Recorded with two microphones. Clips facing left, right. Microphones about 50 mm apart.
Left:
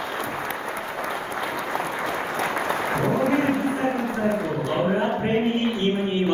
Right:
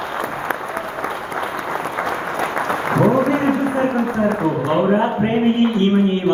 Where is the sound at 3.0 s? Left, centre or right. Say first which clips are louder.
Right 8 dB; right.